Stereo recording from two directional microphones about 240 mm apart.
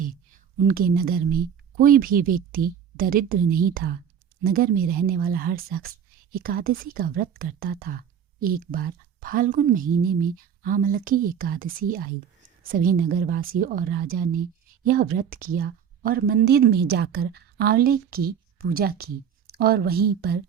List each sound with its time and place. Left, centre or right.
0.7 s speech: right